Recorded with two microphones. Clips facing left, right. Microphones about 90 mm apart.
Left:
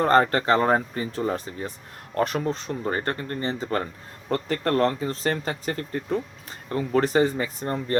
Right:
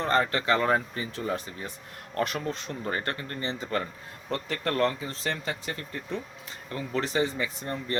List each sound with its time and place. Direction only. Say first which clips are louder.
0.0 s speech: left 6 dB; 45° left (ahead or behind)